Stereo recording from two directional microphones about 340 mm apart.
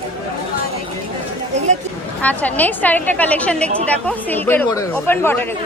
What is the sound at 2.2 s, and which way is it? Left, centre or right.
Speech, centre.